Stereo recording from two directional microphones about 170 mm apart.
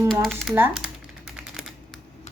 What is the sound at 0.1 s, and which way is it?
Speech, 5° left (ahead or behind).